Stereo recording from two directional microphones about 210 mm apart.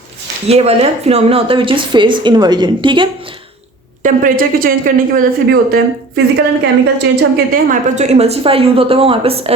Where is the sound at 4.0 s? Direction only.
40° right (ahead or behind).